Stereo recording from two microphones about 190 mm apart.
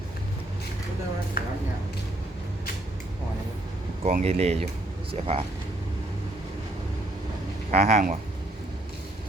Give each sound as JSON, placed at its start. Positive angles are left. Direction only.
{"t": 1.4, "sound": "speech", "side_deg": 50}
{"t": 4.1, "sound": "speech", "side_deg": -35}
{"t": 7.7, "sound": "speech", "side_deg": -35}